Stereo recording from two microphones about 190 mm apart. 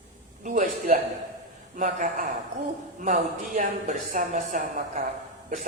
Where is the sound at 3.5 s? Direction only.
40° right (ahead or behind).